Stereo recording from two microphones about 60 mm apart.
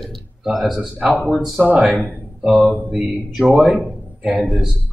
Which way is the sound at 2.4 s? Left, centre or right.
Centre.